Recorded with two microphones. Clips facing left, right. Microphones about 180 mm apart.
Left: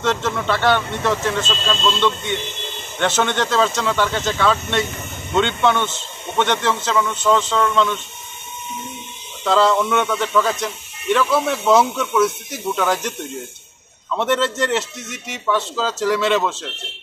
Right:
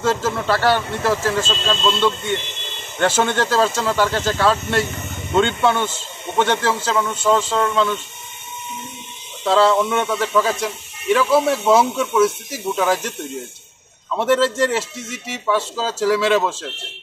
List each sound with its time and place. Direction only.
0.0 s a man's voice: 5° right (ahead or behind)
9.4 s a man's voice: 5° right (ahead or behind)
14.1 s a man's voice: 5° right (ahead or behind)